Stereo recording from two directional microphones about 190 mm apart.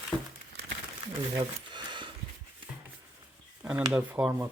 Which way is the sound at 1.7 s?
25° right (ahead or behind).